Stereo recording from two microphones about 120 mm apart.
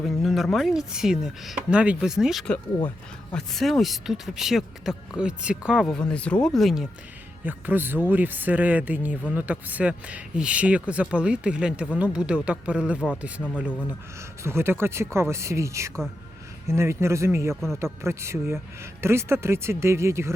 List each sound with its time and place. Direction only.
0.0 s speech: centre (ahead or behind)
5.8 s speech: 5° left (ahead or behind)
7.4 s speech: 15° right (ahead or behind)
14.4 s speech: 20° right (ahead or behind)